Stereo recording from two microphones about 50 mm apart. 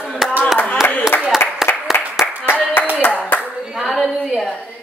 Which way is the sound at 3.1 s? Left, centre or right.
Left.